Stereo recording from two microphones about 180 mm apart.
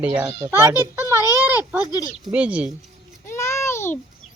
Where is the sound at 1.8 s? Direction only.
20° left (ahead or behind).